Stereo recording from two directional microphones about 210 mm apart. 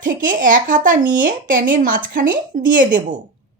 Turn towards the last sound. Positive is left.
turn(degrees=-40)  # may be behind; listen again after turning